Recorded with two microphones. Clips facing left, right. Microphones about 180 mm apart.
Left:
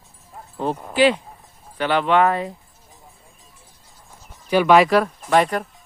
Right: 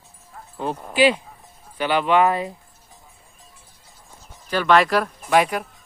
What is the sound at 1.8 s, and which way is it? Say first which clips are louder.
Speech: left 1 dB; 10° right (ahead or behind).